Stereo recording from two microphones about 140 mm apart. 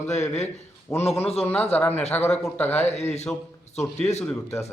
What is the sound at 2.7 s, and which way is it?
Speech, 50° left (ahead or behind).